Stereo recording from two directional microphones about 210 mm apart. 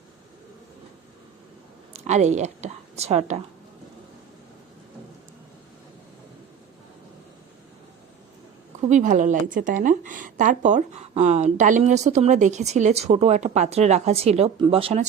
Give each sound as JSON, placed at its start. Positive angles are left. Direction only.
{"t": 1.9, "sound": "speech", "side_deg": -30}
{"t": 8.9, "sound": "a woman's voice", "side_deg": -35}